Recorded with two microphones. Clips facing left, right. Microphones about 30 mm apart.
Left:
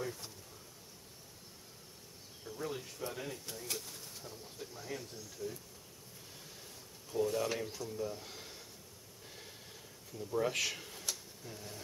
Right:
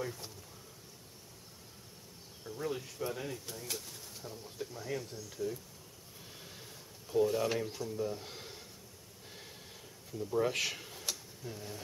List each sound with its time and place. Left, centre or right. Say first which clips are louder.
0.0 s speech: right 1 dB; centre
2.4 s speech: right 3 dB; centre
7.1 s speech: right 4 dB; centre
10.1 s speech: right 2 dB; centre